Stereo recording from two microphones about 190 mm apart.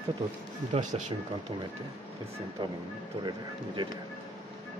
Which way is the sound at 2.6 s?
25° right (ahead or behind).